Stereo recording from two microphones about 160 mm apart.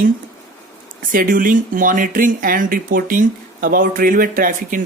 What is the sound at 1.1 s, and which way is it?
Speech, 60° right (ahead or behind).